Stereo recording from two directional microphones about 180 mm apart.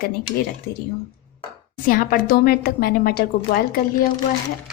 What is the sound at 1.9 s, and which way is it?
A woman's voice, 50° left (ahead or behind).